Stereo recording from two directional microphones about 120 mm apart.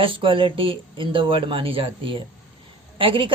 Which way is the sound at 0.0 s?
45° right (ahead or behind).